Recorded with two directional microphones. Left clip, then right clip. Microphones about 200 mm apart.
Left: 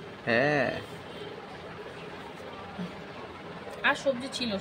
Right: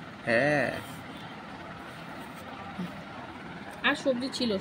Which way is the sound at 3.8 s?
45° left (ahead or behind).